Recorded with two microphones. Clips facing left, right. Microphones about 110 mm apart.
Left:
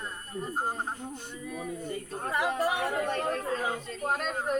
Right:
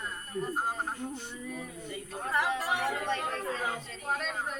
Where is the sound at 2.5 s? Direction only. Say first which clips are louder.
Left 3 dB; 50° left (ahead or behind).